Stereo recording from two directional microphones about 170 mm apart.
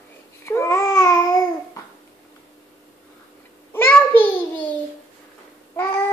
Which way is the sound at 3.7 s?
15° left (ahead or behind).